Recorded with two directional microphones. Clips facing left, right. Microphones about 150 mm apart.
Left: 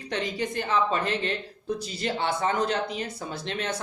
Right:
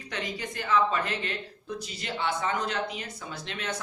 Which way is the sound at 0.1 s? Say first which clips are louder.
Left 6 dB; 30° left (ahead or behind).